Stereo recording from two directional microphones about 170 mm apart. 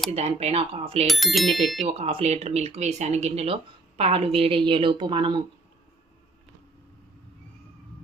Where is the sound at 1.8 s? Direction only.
35° right (ahead or behind).